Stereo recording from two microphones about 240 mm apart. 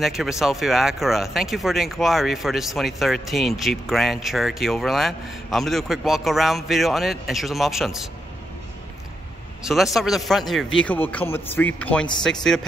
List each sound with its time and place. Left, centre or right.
0.0 s speech: centre
9.6 s a man's voice: centre